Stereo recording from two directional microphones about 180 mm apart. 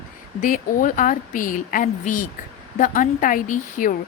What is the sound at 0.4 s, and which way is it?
Speech, 45° left (ahead or behind).